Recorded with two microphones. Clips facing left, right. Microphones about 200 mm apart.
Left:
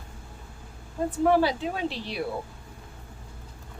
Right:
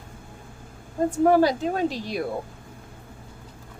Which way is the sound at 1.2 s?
45° right (ahead or behind).